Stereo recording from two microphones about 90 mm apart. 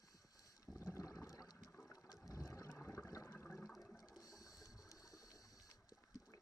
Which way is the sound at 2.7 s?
30° left (ahead or behind).